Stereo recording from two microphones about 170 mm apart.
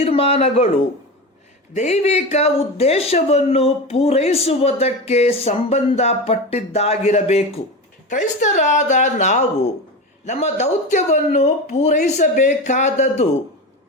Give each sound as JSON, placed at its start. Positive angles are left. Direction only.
{"t": 0.0, "sound": "speech", "side_deg": 35}
{"t": 1.7, "sound": "speech", "side_deg": 40}